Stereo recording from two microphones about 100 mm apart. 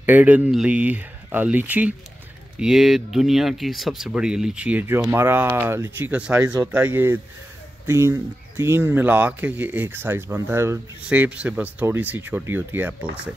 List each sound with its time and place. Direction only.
0.0 s speech: 15° right (ahead or behind)
2.6 s speech: 5° right (ahead or behind); by 10.8 s 25° right (ahead or behind)
11.1 s speech: 15° right (ahead or behind)